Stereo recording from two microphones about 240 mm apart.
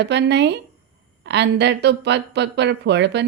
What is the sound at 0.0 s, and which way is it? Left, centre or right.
Speech, right.